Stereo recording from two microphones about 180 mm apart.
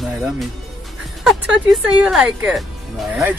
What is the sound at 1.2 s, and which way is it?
Speech, 5° right (ahead or behind).